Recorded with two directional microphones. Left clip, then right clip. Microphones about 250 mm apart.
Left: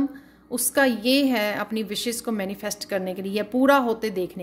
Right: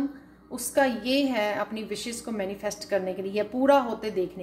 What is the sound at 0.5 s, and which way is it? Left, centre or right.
A woman's voice, left.